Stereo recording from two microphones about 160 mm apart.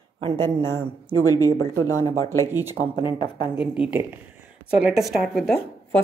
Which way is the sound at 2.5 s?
15° right (ahead or behind).